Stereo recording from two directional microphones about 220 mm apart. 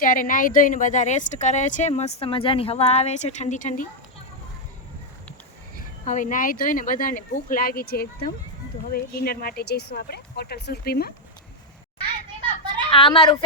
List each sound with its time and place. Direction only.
0.0 s a woman's voice: 40° left (ahead or behind)
6.1 s a woman's voice: 35° left (ahead or behind)
12.9 s a woman's voice: 25° left (ahead or behind)